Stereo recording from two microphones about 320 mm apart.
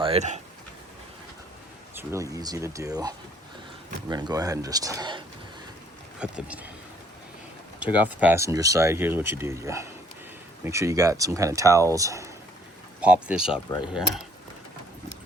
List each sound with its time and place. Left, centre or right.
0.0 s speech: centre
2.0 s speech: centre
7.8 s speech: centre